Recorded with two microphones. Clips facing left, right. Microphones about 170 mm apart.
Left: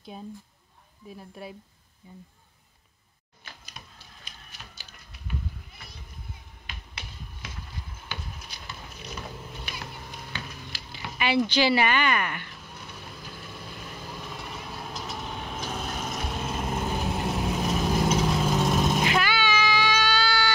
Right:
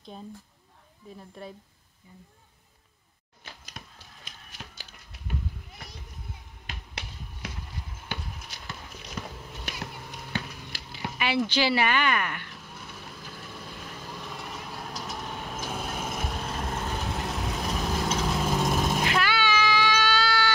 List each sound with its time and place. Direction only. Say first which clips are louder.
0.1 s speech: left 3 dB; 5° left (ahead or behind)
2.0 s speech: left 5 dB; 25° left (ahead or behind)
3.8 s a sound: right 3 dB; 80° right
6.7 s finger snapping: right 2 dB; 75° right (ahead or behind)
10.5 s a sound: even; 5° right (ahead or behind)
11.1 s vehicle: left 3 dB; 5° right (ahead or behind); by 18.3 s 10° left (ahead or behind)
18.3 s vehicle: left 2 dB; centre (ahead or behind)
18.9 s vehicle: left 1 dB; 5° left (ahead or behind)